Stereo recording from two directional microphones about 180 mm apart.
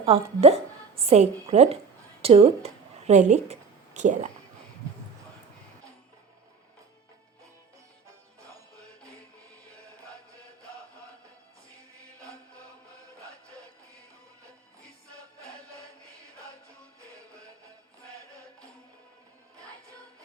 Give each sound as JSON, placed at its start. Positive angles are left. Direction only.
{"t": 0.0, "sound": "a woman's voice", "side_deg": -35}